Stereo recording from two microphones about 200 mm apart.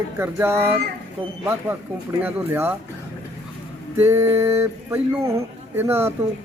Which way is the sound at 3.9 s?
10° right (ahead or behind).